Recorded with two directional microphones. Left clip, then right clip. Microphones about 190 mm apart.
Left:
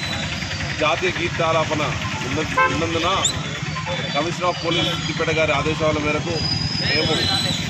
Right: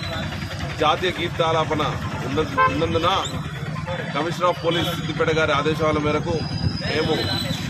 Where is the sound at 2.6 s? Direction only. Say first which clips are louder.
Left 1 dB; 45° left (ahead or behind).